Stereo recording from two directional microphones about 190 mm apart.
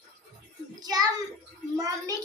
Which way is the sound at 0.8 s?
20° right (ahead or behind).